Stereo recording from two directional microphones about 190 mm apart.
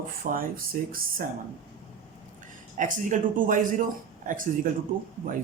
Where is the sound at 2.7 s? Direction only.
45° right (ahead or behind).